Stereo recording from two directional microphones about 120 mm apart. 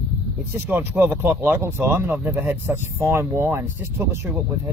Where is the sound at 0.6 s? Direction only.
15° right (ahead or behind).